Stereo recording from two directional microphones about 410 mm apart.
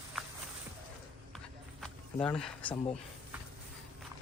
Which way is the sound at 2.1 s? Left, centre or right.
Centre.